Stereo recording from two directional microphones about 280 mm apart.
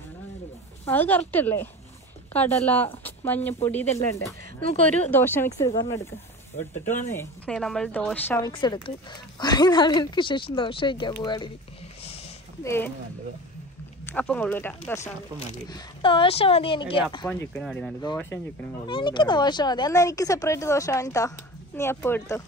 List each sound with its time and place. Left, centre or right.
0.8 s speech: centre
6.5 s speech: left
7.0 s speech: centre
12.6 s speech: centre
14.0 s speech: centre
15.3 s speech: centre
18.9 s speech: centre